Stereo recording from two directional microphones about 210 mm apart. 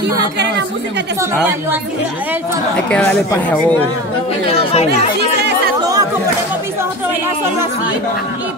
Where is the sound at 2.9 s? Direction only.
5° left (ahead or behind).